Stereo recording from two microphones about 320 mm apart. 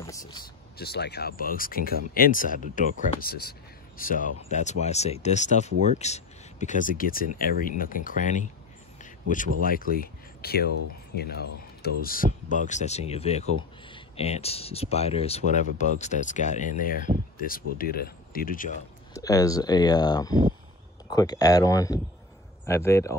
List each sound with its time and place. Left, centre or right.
0.0 s speech: centre
0.7 s speech: left
9.6 s speech: left
19.1 s speech: centre